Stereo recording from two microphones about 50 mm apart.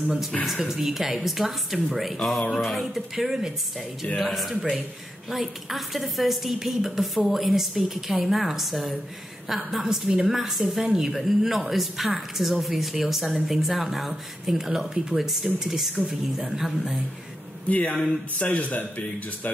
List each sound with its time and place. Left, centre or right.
0.5 s a woman's voice: centre
17.6 s speech: left
17.9 s a woman's voice: centre
18.4 s speech: left